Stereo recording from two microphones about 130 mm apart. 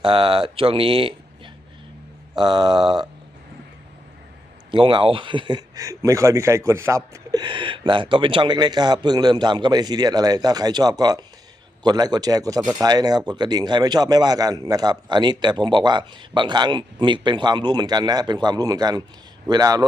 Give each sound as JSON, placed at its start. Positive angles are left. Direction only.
{"t": 0.0, "sound": "speech", "side_deg": -40}
{"t": 2.3, "sound": "speech", "side_deg": -35}
{"t": 4.7, "sound": "a man's voice", "side_deg": -40}